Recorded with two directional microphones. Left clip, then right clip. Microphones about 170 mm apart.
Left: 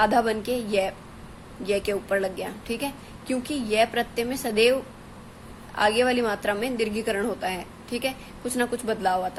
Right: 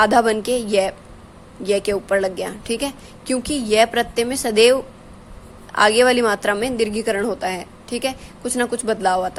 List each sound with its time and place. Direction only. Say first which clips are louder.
0.0 s a woman's voice: right 6 dB; 35° right (ahead or behind)